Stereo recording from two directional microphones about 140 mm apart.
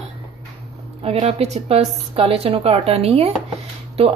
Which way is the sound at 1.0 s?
50° right (ahead or behind).